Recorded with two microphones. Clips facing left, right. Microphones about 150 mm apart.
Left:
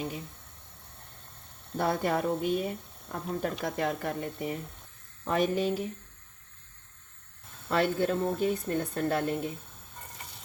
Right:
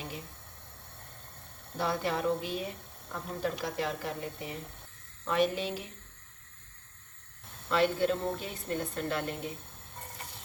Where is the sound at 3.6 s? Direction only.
50° left (ahead or behind).